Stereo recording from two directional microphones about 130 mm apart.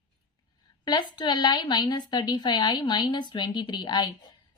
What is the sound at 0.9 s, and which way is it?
Speech, 35° left (ahead or behind).